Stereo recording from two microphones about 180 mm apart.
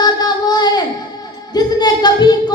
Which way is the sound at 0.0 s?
20° left (ahead or behind).